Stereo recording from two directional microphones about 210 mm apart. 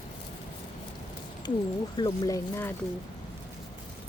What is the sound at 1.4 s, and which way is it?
Speech, 20° left (ahead or behind).